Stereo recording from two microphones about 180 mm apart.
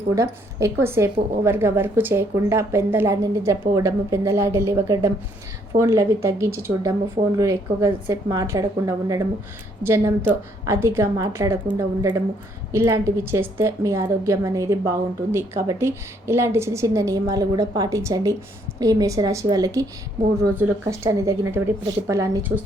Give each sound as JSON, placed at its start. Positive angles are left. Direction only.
{"t": 0.1, "sound": "a woman's voice", "side_deg": -15}